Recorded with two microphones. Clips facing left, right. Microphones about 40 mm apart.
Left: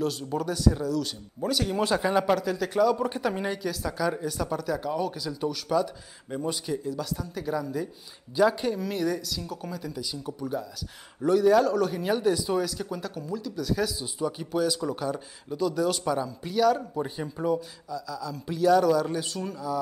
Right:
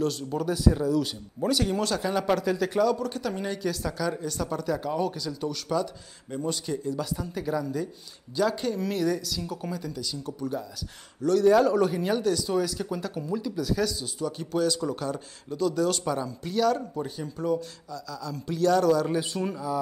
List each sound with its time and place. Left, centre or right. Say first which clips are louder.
0.0 s speech: right 1 dB; centre
1.8 s speech: left 3 dB; centre
2.2 s speech: right 1 dB; centre
3.0 s speech: left 3 dB; centre
11.5 s speech: right 1 dB; centre
13.7 s speech: left 2 dB; centre
19.0 s speech: right 3 dB; centre